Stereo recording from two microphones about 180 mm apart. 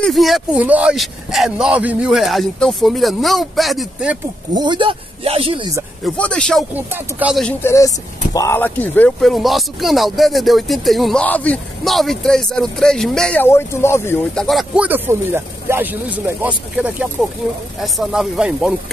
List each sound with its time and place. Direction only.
0.0 s speech: centre (ahead or behind)
4.6 s speech: 25° right (ahead or behind)
6.0 s speech: 5° left (ahead or behind)
6.7 s speech: 10° right (ahead or behind)
7.4 s speech: 15° left (ahead or behind)
14.4 s speech: centre (ahead or behind)